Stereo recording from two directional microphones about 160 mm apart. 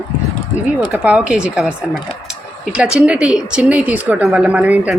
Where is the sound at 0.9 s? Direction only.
10° right (ahead or behind).